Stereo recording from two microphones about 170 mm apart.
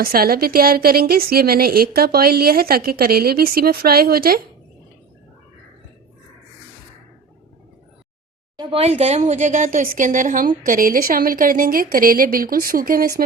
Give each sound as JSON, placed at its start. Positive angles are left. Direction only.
{"t": 0.0, "sound": "speech", "side_deg": -60}
{"t": 8.5, "sound": "speech", "side_deg": -35}